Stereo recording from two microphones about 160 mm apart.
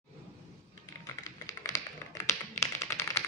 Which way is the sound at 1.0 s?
20° left (ahead or behind).